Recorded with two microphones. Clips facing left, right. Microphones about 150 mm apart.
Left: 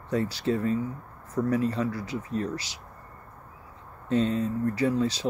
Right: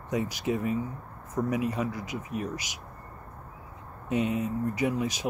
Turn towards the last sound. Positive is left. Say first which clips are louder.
# left 3 dB
turn(degrees=-15)  # may be behind; listen again after turning